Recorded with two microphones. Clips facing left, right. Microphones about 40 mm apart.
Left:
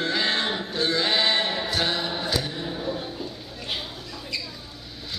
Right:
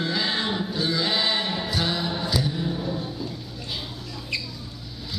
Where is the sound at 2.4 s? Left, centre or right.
Centre.